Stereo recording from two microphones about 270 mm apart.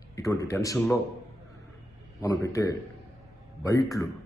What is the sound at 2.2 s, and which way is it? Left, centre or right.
A man's voice, centre.